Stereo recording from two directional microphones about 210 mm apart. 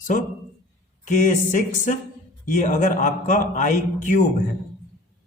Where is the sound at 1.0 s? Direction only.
35° left (ahead or behind).